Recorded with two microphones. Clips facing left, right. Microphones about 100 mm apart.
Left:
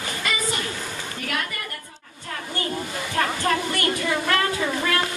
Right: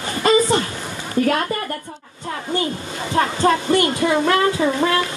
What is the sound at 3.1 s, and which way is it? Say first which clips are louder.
Speech: right 6 dB; 20° right (ahead or behind).